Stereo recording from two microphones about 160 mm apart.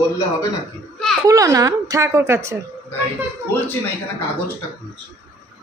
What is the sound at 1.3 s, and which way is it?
A woman's voice, 20° right (ahead or behind).